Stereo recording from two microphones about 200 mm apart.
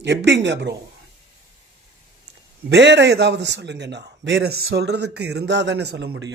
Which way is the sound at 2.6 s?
60° right (ahead or behind).